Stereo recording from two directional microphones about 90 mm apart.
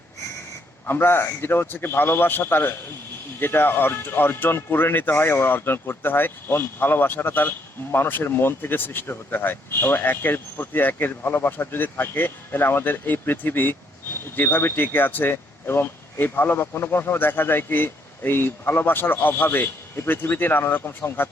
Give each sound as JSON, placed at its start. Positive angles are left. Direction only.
{"t": 0.9, "sound": "speech", "side_deg": 25}